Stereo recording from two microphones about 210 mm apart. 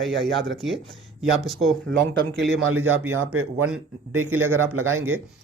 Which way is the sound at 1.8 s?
55° right (ahead or behind).